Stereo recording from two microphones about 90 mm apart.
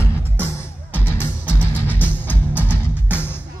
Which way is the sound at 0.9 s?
25° left (ahead or behind).